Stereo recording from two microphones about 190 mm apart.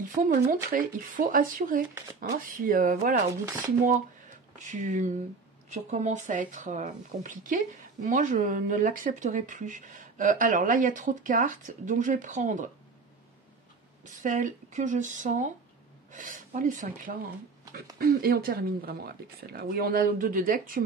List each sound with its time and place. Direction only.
0.0 s speech: 45° right (ahead or behind)
4.6 s speech: 40° right (ahead or behind)
14.0 s speech: 40° right (ahead or behind)